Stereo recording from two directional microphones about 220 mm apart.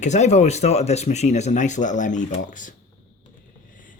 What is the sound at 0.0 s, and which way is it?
Speech, 30° left (ahead or behind).